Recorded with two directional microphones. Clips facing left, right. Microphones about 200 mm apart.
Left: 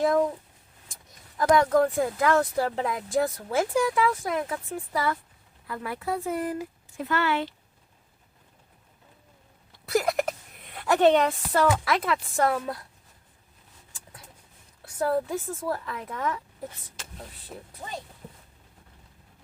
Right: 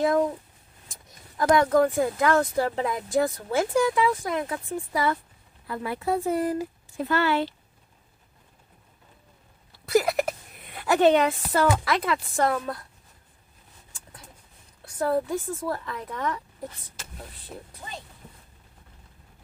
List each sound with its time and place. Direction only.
0.0 s speech: centre (ahead or behind)
1.4 s speech: centre (ahead or behind)
5.6 s speech: 25° right (ahead or behind)
9.7 s a sound: centre (ahead or behind)
10.8 s speech: 5° right (ahead or behind)
14.8 s speech: centre (ahead or behind)
17.0 s a sound: 5° right (ahead or behind)
17.5 s speech: 5° left (ahead or behind)